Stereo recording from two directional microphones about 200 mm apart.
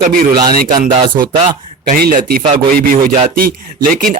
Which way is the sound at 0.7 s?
25° right (ahead or behind).